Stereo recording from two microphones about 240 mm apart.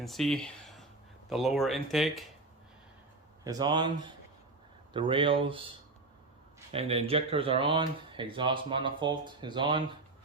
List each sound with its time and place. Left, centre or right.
0.0 s speech: centre
3.4 s speech: centre